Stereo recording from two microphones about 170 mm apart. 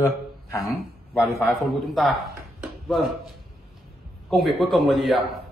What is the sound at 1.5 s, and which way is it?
Speech, centre (ahead or behind).